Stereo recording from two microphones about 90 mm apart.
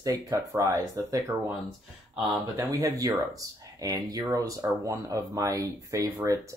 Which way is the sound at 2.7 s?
40° right (ahead or behind).